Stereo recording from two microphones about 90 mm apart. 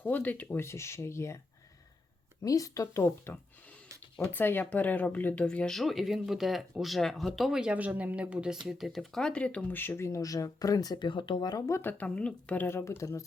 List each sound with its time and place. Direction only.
0.0 s speech: 20° left (ahead or behind)
2.4 s speech: 40° left (ahead or behind); by 8.5 s 10° right (ahead or behind)
8.6 s speech: centre (ahead or behind); by 11.1 s 50° left (ahead or behind)
11.1 s speech: 60° left (ahead or behind)
11.7 s speech: 25° left (ahead or behind)
12.0 s speech: 15° left (ahead or behind); by 13.2 s 35° left (ahead or behind)